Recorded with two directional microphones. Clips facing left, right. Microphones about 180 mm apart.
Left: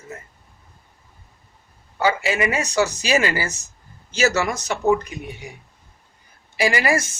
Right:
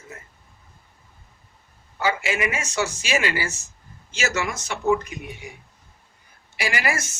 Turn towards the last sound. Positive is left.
turn(degrees=30)  # may be behind; listen again after turning